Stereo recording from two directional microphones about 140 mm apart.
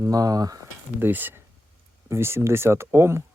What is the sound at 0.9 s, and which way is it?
Speech, 15° right (ahead or behind).